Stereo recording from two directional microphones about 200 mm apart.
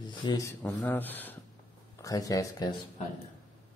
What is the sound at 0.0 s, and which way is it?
A man's voice, 20° left (ahead or behind).